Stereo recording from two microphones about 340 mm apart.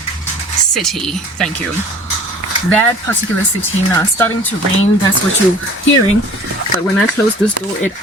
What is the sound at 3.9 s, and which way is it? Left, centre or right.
Speech, centre.